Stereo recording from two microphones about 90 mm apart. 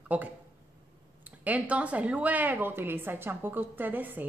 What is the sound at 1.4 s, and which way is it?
A woman's voice, 15° right (ahead or behind).